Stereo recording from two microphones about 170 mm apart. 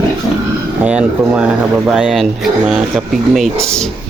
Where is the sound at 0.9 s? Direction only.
5° right (ahead or behind).